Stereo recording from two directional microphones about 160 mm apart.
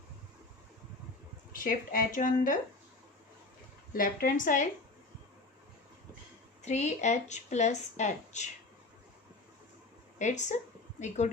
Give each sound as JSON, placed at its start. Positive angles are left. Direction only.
{"t": 1.5, "sound": "a woman's voice", "side_deg": 60}
{"t": 3.9, "sound": "a woman's voice", "side_deg": 60}
{"t": 6.6, "sound": "speech", "side_deg": 45}
{"t": 10.2, "sound": "speech", "side_deg": 50}